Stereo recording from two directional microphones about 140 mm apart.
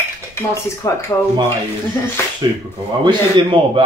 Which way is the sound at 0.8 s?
25° left (ahead or behind).